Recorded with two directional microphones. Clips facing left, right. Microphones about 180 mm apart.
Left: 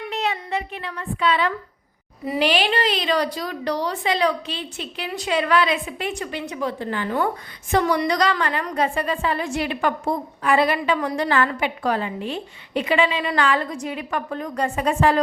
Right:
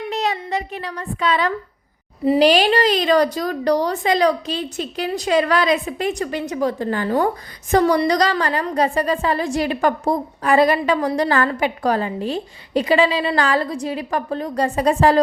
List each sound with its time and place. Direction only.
0.1 s a woman's voice: 40° right (ahead or behind)